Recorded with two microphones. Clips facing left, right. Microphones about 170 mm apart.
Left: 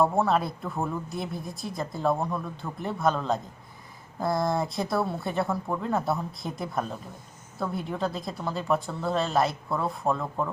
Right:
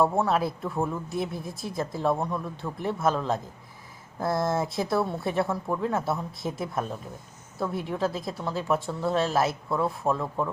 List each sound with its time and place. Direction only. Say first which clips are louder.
0.0 s speech: even; centre (ahead or behind)